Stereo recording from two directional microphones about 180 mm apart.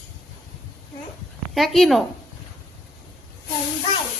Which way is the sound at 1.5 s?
Centre (ahead or behind).